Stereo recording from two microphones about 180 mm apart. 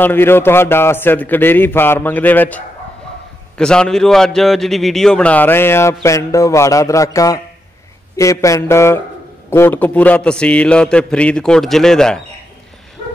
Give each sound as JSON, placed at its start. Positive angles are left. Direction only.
{"t": 0.0, "sound": "a man's voice", "side_deg": 10}